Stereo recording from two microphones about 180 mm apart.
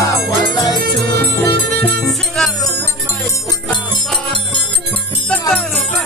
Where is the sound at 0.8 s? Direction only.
60° right (ahead or behind).